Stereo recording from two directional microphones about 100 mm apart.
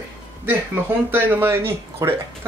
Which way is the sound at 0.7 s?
20° right (ahead or behind).